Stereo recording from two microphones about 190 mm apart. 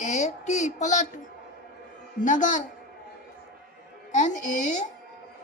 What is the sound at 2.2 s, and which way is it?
Speech, 40° left (ahead or behind).